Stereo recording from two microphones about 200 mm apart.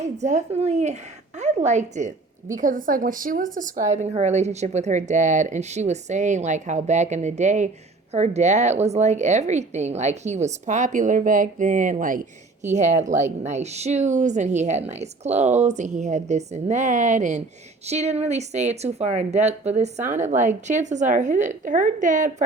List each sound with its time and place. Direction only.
0.0 s a woman's voice: 35° right (ahead or behind)